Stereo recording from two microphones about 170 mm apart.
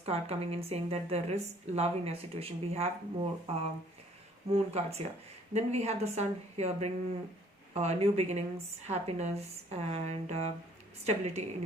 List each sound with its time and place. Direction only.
0.0 s a woman's voice: 35° right (ahead or behind)